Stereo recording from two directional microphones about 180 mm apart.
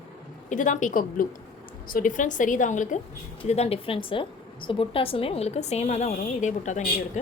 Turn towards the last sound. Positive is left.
turn(degrees=40)  # may be behind; listen again after turning